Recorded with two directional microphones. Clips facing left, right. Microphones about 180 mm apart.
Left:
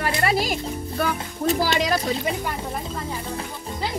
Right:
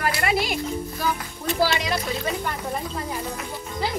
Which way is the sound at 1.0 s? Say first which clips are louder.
Left 2 dB; 60° left (ahead or behind).